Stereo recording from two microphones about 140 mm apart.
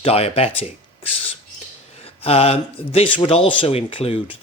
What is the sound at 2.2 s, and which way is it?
Speech, 45° left (ahead or behind).